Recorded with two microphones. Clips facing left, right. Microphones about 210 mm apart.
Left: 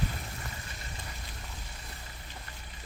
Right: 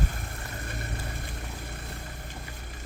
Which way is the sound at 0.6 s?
55° right (ahead or behind).